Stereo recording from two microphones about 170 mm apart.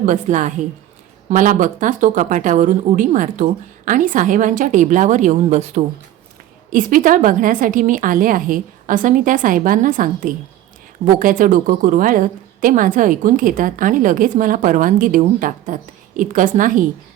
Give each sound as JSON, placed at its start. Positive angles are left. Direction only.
{"t": 0.0, "sound": "a woman's voice", "side_deg": -45}
{"t": 6.7, "sound": "a woman's voice", "side_deg": -55}